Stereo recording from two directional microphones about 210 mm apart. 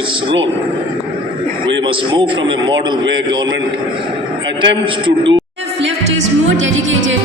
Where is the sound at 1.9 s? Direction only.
25° right (ahead or behind).